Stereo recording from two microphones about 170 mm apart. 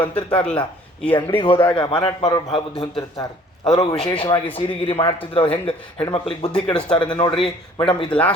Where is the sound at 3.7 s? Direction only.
20° left (ahead or behind).